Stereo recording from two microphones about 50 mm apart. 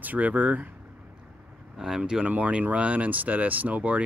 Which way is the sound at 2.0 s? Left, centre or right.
Centre.